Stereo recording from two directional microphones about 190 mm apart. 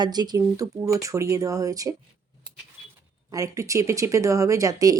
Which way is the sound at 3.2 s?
15° right (ahead or behind).